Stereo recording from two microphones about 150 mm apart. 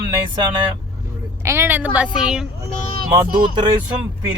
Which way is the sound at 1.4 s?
15° right (ahead or behind).